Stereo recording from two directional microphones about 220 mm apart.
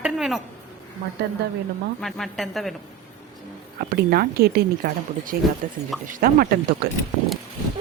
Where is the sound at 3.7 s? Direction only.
45° right (ahead or behind).